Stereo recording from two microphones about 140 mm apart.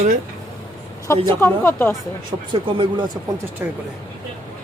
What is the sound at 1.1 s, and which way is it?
Speech, 20° left (ahead or behind).